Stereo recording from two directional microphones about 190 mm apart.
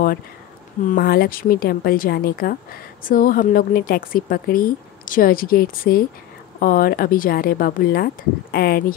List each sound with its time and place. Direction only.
0.8 s speech: 50° left (ahead or behind)